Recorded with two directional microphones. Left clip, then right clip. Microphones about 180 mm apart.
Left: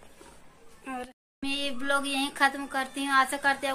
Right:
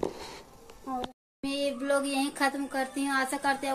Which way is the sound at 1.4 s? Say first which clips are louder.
Right 1 dB; 10° right (ahead or behind).